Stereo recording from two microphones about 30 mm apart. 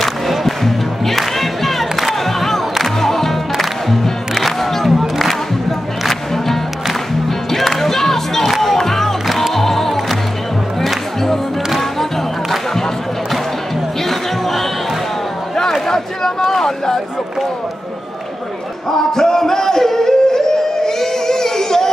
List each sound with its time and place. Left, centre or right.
0.0 s music: centre
14.0 s music: centre
15.9 s a sound: centre
18.9 s music: centre